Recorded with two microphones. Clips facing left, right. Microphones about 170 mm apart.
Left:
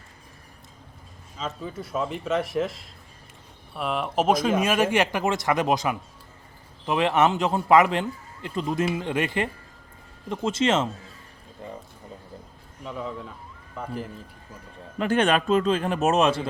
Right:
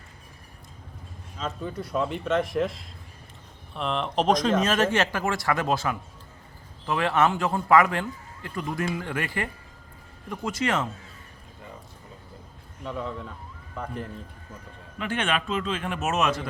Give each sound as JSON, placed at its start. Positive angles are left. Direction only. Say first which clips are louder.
{"t": 1.4, "sound": "speech", "louder": "right 1 dB", "side_deg": 0}
{"t": 12.8, "sound": "speech", "louder": "even", "side_deg": 5}
{"t": 14.9, "sound": "a man's voice", "louder": "left 6 dB", "side_deg": 40}